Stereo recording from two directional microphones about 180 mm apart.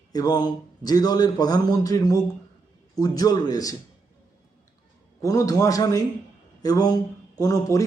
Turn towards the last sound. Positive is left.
turn(degrees=20)  # may be behind; listen again after turning